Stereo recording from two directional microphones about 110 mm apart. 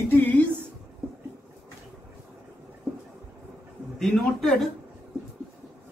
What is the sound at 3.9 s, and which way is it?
Speech, 5° left (ahead or behind).